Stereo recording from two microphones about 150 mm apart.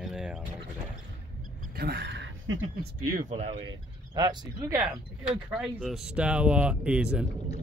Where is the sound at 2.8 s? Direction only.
75° right (ahead or behind); by 3.7 s 40° right (ahead or behind).